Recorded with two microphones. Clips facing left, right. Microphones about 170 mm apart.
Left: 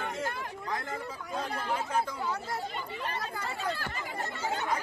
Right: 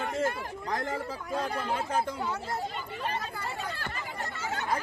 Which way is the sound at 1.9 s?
30° right (ahead or behind).